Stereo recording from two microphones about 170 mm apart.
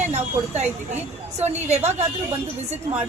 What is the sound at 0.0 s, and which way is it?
Speech, 40° right (ahead or behind).